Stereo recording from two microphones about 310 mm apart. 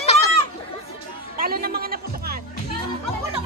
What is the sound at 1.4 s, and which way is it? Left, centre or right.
Speech, right.